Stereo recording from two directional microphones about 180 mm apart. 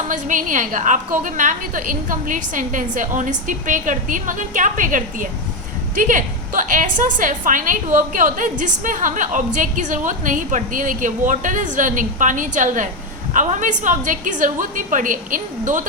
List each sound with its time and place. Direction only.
0.1 s a woman's voice: 45° right (ahead or behind)